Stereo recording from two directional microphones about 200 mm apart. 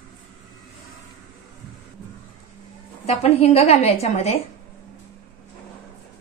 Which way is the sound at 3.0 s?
30° left (ahead or behind).